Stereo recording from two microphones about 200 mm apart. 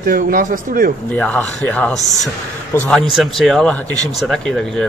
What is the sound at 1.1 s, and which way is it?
A man's voice, 10° left (ahead or behind).